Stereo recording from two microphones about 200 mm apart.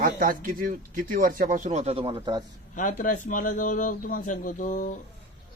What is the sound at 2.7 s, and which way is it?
A man's voice, 40° left (ahead or behind).